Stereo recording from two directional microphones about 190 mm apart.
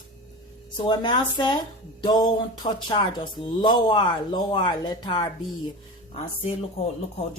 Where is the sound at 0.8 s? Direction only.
25° left (ahead or behind).